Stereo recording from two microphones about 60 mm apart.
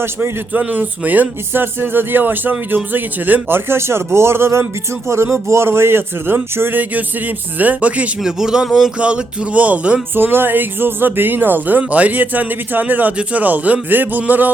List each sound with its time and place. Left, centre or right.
0.5 s speech: right
8.2 s a man's voice: centre
9.0 s a man's voice: centre
10.2 s a man's voice: right